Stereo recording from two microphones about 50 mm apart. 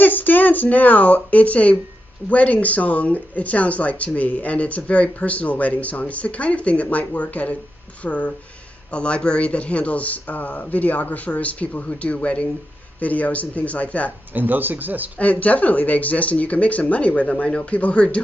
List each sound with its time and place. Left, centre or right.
0.0 s speech: left
14.3 s speech: right
15.1 s speech: left